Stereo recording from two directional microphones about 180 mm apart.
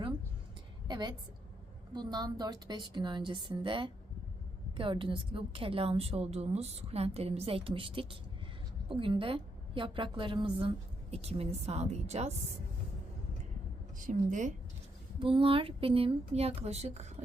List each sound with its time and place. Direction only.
0.9 s a woman's voice: 25° right (ahead or behind)
14.1 s a woman's voice: 45° right (ahead or behind)
15.2 s a woman's voice: 30° right (ahead or behind)